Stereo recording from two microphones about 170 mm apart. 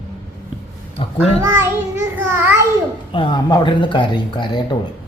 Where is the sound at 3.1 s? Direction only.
25° left (ahead or behind).